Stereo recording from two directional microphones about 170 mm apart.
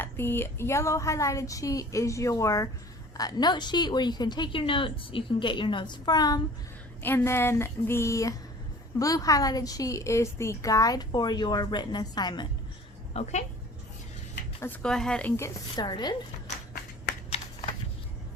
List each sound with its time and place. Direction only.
0.0 s a woman's voice: 15° left (ahead or behind)
13.2 s speech: 40° left (ahead or behind)
14.6 s speech: 5° left (ahead or behind)
15.4 s a woman's voice: 20° left (ahead or behind)
17.2 s typing: 35° left (ahead or behind)